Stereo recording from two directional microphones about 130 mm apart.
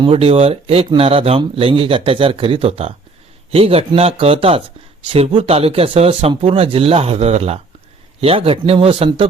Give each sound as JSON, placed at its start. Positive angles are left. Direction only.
{"t": 0.0, "sound": "speech", "side_deg": -45}